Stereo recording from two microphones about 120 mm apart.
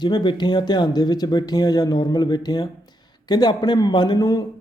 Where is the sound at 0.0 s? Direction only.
40° left (ahead or behind).